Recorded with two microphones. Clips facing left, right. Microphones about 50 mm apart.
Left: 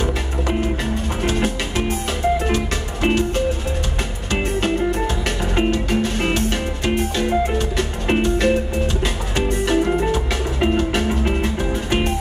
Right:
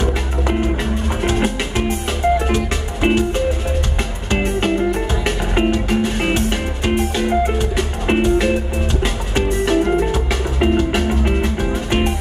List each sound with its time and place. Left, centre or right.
1.2 s music: centre
2.5 s music: centre
4.3 s music: centre